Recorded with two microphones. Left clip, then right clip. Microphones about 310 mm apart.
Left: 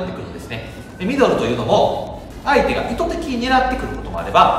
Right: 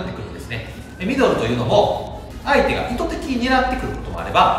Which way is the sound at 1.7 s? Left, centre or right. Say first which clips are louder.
Even; centre.